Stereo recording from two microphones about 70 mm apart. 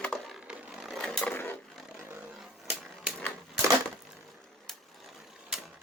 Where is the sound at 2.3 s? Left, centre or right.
Centre.